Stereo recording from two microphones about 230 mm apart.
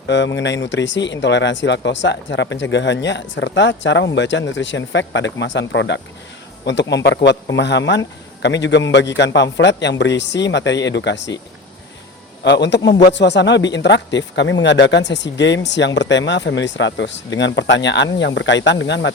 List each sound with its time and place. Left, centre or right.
0.1 s speech: left
12.5 s speech: left